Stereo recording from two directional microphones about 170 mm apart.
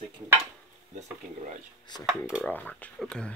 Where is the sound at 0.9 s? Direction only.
45° right (ahead or behind).